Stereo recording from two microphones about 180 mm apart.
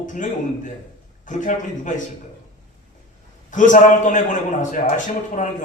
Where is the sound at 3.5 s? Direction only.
45° left (ahead or behind).